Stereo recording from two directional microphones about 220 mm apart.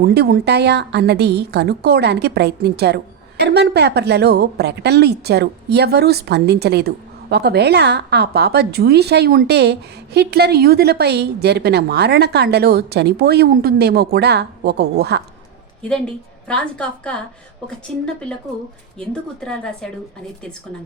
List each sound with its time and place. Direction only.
0.1 s a woman's voice: 50° right (ahead or behind)
15.8 s a woman's voice: 5° left (ahead or behind)